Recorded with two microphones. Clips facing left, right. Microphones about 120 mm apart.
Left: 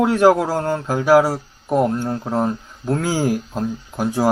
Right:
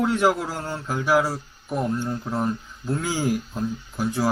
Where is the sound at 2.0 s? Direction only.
45° left (ahead or behind).